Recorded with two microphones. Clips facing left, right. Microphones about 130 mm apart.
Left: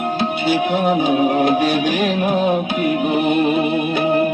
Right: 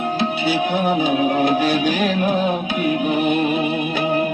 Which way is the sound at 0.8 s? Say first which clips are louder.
Left 2 dB; 45° left (ahead or behind).